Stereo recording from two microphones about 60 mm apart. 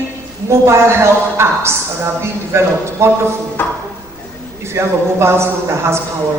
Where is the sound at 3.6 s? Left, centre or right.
Left.